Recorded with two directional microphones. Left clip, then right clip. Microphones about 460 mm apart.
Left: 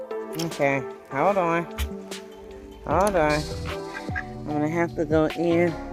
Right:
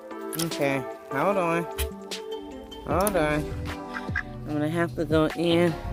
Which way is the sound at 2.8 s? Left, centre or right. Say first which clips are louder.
Left 3 dB; centre.